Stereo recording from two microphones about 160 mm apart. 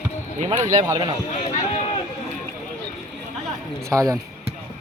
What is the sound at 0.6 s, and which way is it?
Speech, 20° right (ahead or behind).